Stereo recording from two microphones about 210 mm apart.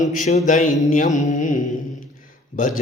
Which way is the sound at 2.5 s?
40° left (ahead or behind).